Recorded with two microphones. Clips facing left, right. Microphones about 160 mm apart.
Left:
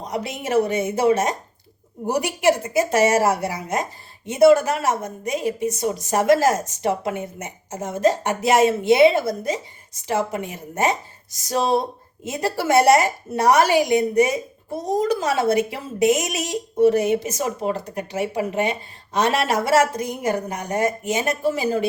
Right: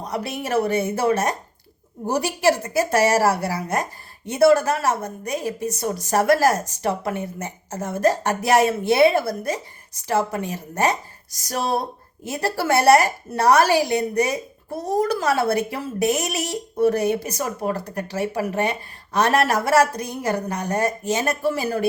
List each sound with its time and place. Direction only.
0.1 s a woman's voice: 20° left (ahead or behind)